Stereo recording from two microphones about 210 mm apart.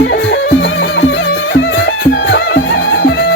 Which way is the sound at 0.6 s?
60° left (ahead or behind).